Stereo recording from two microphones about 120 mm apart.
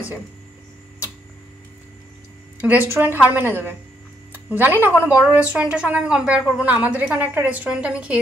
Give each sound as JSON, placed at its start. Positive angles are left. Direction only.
{"t": 2.9, "sound": "speech", "side_deg": -15}